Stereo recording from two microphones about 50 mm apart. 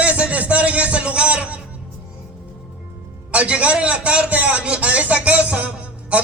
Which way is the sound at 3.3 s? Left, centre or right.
Right.